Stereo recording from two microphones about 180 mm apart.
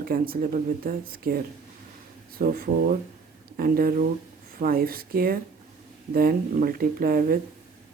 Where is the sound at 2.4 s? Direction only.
55° right (ahead or behind).